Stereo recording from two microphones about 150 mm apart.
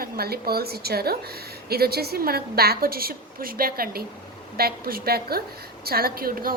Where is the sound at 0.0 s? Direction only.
90° right.